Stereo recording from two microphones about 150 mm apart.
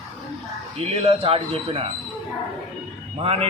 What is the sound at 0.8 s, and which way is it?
Speech, 40° right (ahead or behind).